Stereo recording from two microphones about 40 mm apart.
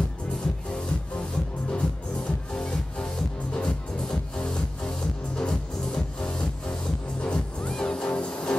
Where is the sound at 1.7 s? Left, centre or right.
Left.